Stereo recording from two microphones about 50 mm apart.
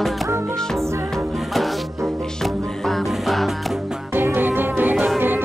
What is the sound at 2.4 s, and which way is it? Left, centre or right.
Music, centre.